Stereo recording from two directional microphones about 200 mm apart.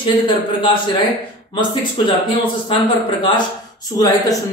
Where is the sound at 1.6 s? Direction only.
25° left (ahead or behind).